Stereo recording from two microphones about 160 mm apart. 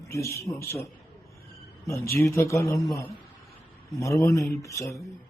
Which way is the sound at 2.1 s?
15° left (ahead or behind).